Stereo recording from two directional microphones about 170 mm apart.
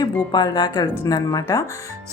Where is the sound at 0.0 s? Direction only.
25° left (ahead or behind).